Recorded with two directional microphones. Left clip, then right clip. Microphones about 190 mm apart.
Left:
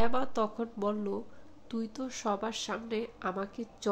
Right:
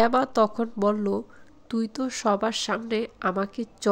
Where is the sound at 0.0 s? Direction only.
45° right (ahead or behind).